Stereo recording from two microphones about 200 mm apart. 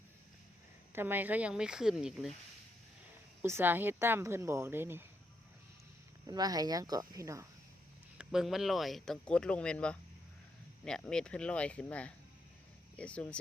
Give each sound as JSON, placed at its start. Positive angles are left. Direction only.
{"t": 0.9, "sound": "speech", "side_deg": -10}
{"t": 3.4, "sound": "speech", "side_deg": -10}
{"t": 6.2, "sound": "speech", "side_deg": -20}
{"t": 8.2, "sound": "speech", "side_deg": 0}